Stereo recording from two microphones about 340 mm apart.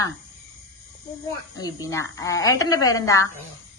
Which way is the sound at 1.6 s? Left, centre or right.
Centre.